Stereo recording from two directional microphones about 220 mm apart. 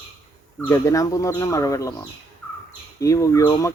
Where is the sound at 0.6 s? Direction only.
15° left (ahead or behind).